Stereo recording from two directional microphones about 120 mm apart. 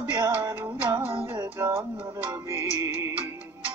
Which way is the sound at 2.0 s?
40° right (ahead or behind).